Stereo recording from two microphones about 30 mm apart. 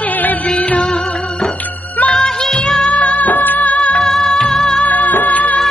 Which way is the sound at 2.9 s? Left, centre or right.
Left.